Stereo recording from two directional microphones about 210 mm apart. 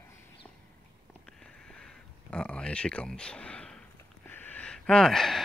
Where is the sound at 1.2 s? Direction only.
5° left (ahead or behind).